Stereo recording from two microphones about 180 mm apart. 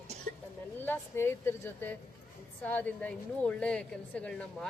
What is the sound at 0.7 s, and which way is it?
A woman's voice, 10° left (ahead or behind).